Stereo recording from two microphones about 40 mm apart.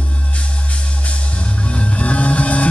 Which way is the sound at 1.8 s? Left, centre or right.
Left.